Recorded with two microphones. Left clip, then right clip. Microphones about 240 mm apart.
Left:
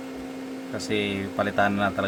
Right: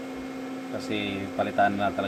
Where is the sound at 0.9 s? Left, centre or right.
Left.